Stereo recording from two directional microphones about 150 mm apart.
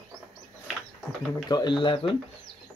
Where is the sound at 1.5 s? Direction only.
30° left (ahead or behind).